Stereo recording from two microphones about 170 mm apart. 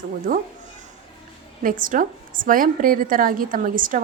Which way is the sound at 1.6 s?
55° right (ahead or behind).